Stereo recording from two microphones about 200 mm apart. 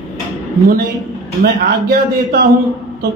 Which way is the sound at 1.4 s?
50° right (ahead or behind).